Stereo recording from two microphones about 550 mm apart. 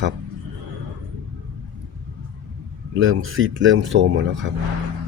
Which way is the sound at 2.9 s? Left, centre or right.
Right.